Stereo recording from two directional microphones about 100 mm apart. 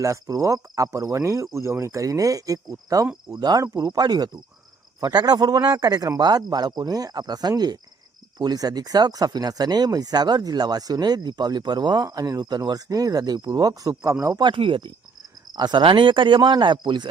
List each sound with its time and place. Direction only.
0.0 s speech: 35° right (ahead or behind)
14.3 s speech: 55° right (ahead or behind)
15.5 s speech: 45° right (ahead or behind)